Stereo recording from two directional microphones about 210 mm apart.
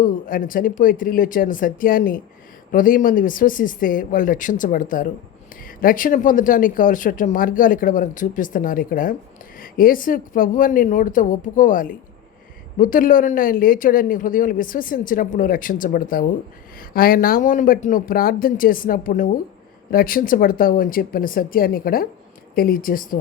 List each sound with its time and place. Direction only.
0.0 s speech: 40° left (ahead or behind)